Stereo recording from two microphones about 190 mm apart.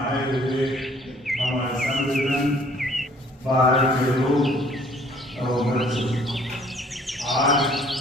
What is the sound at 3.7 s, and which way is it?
Mantra, centre (ahead or behind).